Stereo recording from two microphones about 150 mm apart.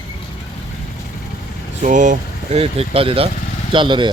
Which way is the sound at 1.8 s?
55° right (ahead or behind).